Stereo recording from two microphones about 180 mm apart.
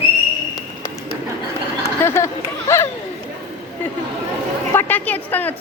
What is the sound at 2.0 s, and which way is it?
Chatter, 15° left (ahead or behind).